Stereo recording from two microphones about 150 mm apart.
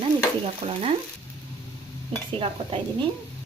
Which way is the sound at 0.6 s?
40° right (ahead or behind).